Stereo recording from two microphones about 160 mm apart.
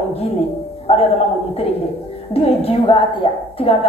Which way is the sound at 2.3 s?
40° left (ahead or behind).